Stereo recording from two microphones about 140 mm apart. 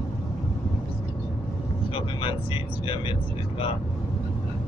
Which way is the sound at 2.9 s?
40° left (ahead or behind).